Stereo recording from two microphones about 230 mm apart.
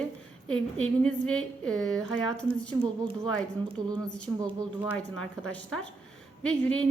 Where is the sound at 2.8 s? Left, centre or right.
Right.